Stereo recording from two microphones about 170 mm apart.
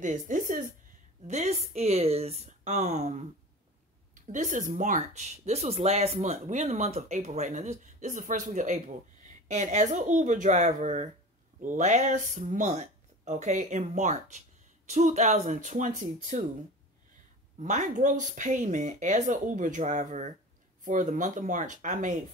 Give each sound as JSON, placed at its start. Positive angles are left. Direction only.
{"t": 0.0, "sound": "speech", "side_deg": -50}
{"t": 17.6, "sound": "speech", "side_deg": -45}